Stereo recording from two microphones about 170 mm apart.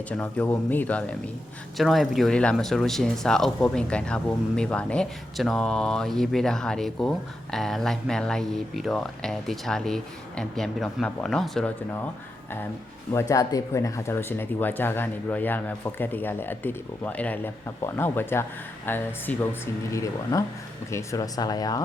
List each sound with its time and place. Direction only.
0.1 s speech: 10° left (ahead or behind)
13.1 s speech: 20° left (ahead or behind)